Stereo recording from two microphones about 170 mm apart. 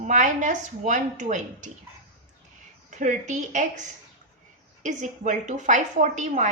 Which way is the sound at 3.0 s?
45° right (ahead or behind).